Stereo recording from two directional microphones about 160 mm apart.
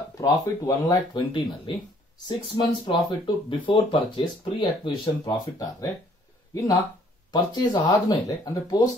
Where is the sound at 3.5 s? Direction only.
30° left (ahead or behind).